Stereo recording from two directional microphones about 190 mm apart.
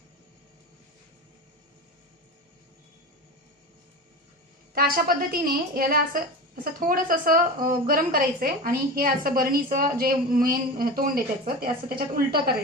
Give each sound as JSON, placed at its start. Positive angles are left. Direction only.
{"t": 4.7, "sound": "a woman's voice", "side_deg": -50}